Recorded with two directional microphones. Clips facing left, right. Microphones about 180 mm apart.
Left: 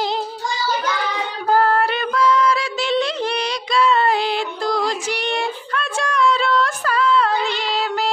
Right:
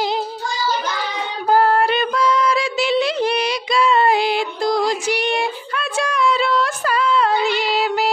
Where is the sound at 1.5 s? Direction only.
10° right (ahead or behind).